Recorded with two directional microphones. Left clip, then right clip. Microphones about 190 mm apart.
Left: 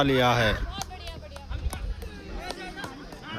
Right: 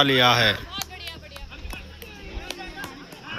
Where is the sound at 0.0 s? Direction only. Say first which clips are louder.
Right 5 dB; 5° left (ahead or behind).